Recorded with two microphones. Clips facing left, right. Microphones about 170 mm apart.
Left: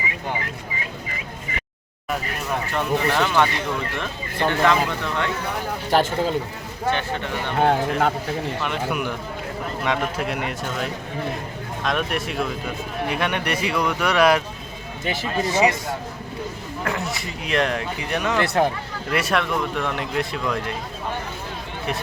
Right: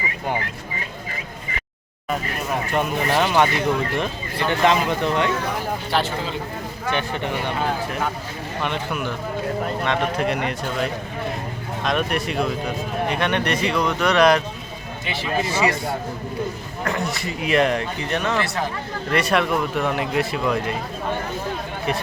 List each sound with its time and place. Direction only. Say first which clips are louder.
2.7 s speech: right 1 dB; 15° right (ahead or behind)
5.9 s speech: left 5 dB; 45° left (ahead or behind)
7.6 s speech: left 10 dB; 65° left (ahead or behind)
8.9 s speech: even; 15° left (ahead or behind)
11.9 s speech: right 2 dB; centre (ahead or behind)
15.0 s speech: even; 45° left (ahead or behind)
15.4 s speech: left 4 dB; 20° left (ahead or behind)
16.8 s speech: right 2 dB; 5° left (ahead or behind)
18.0 s speech: left 2 dB; 10° left (ahead or behind)
18.4 s speech: left 6 dB; 55° left (ahead or behind)
19.1 s speech: right 2 dB; centre (ahead or behind)